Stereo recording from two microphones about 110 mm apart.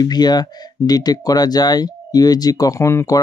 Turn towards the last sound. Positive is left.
turn(degrees=25)  # may be behind; listen again after turning